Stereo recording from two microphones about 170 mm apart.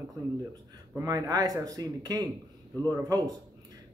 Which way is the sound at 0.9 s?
20° right (ahead or behind).